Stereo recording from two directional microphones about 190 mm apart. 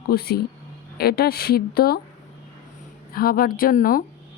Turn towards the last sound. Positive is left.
turn(degrees=50)  # may be behind; listen again after turning